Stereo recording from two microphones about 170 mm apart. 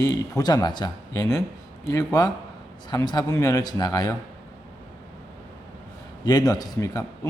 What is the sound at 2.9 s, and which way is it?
Speech, 25° left (ahead or behind).